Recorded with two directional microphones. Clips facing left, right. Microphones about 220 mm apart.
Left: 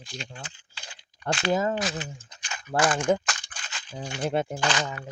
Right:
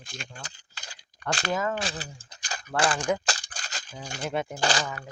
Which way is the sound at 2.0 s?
35° right (ahead or behind).